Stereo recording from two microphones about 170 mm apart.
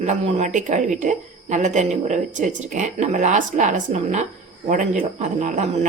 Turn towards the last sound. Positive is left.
turn(degrees=-45)  # may be behind; listen again after turning